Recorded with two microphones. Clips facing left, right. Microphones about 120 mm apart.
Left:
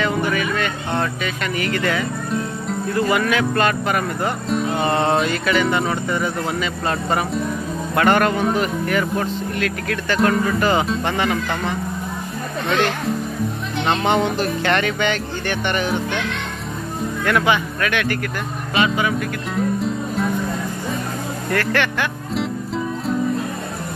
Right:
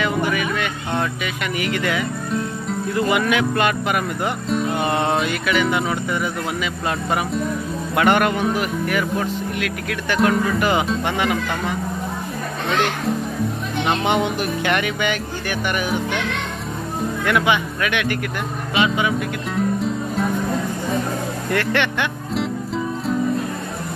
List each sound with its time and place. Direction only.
0.0 s vehicle: 10° right (ahead or behind)
1.2 s speech: 15° right (ahead or behind)
4.5 s music: centre (ahead or behind)
4.7 s speech: 10° right (ahead or behind)
13.8 s speech: 10° right (ahead or behind)
17.3 s speech: 15° right (ahead or behind)
19.5 s music: centre (ahead or behind)
21.5 s speech: 20° right (ahead or behind)